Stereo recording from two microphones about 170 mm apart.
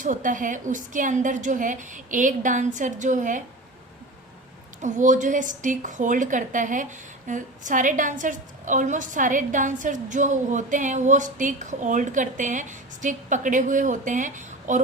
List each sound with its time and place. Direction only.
0.0 s a woman's voice: 50° right (ahead or behind)
4.8 s a woman's voice: 45° right (ahead or behind)